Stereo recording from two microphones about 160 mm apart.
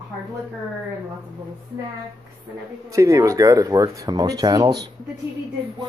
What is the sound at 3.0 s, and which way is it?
Speech, 20° right (ahead or behind).